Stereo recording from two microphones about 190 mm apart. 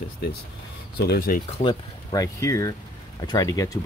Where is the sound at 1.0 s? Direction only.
55° left (ahead or behind).